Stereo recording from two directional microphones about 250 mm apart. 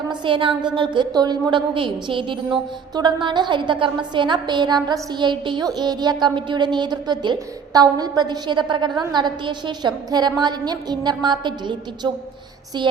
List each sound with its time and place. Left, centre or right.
0.1 s a woman's voice: centre